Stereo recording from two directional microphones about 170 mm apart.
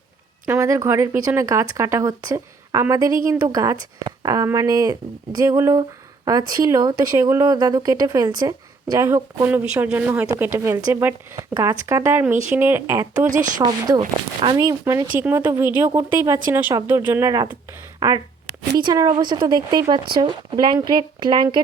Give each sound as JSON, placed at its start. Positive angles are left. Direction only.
{"t": 0.4, "sound": "a woman's voice", "side_deg": -20}
{"t": 18.9, "sound": "a woman's voice", "side_deg": -25}